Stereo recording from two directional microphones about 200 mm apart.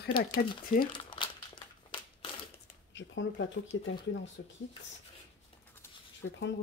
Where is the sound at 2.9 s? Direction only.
65° left (ahead or behind).